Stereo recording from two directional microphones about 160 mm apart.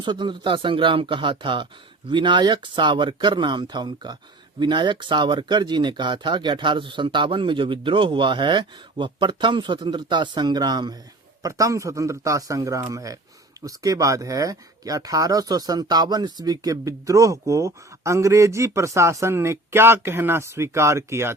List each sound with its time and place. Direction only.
0.0 s speech: 30° right (ahead or behind)